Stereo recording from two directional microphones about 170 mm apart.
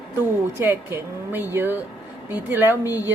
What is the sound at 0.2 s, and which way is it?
Speech, 10° right (ahead or behind).